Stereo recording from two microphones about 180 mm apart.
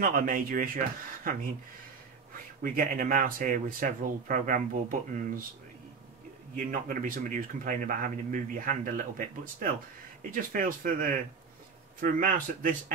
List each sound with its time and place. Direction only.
0.0 s speech: 50° right (ahead or behind)
2.6 s speech: 50° right (ahead or behind)
6.5 s speech: 45° right (ahead or behind)